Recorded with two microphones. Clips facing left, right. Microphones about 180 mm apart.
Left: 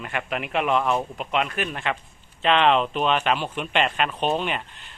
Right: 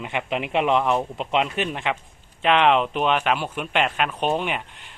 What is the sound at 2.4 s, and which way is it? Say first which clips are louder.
Speech: right 1 dB; 10° right (ahead or behind).